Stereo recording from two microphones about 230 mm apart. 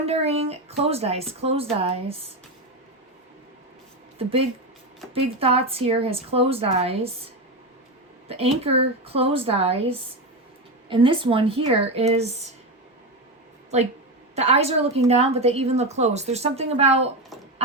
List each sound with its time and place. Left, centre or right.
0.0 s a woman's voice: right
4.2 s a woman's voice: right
8.3 s a woman's voice: right
10.8 s a woman's voice: right
14.3 s a woman's voice: right